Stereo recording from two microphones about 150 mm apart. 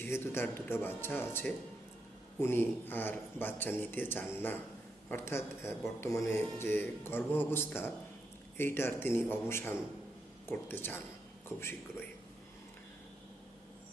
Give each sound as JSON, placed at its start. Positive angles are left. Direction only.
{"t": 0.0, "sound": "speech", "side_deg": 15}